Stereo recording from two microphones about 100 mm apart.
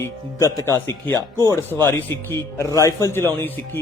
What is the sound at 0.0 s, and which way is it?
Speech, 30° left (ahead or behind).